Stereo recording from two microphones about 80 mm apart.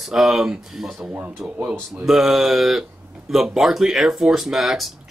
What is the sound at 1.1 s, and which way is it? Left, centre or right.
Speech, right.